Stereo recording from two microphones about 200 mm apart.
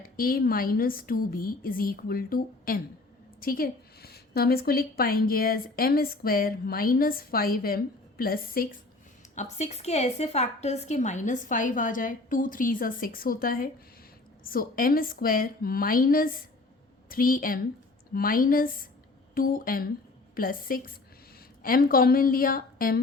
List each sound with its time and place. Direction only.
0.0 s a woman's voice: 45° left (ahead or behind)
9.3 s a woman's voice: 35° left (ahead or behind)